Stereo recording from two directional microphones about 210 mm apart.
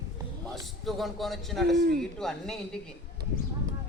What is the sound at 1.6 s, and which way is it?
Speech, 50° right (ahead or behind).